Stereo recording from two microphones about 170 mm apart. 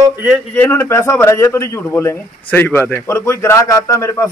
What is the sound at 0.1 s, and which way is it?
Speech, 10° right (ahead or behind).